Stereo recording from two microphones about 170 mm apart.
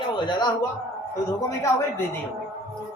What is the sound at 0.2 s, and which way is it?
A man's voice, 25° left (ahead or behind).